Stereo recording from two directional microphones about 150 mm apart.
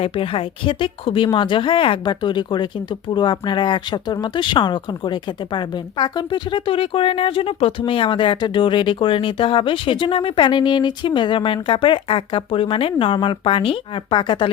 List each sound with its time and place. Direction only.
0.0 s speech: 40° left (ahead or behind)